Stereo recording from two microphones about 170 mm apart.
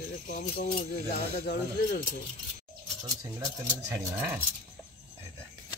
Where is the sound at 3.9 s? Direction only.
10° right (ahead or behind).